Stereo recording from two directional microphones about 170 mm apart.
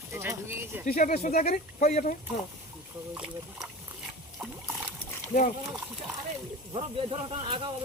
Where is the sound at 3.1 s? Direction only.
5° right (ahead or behind).